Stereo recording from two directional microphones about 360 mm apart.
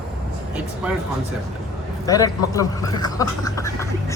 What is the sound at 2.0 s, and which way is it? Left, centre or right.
Speech, centre.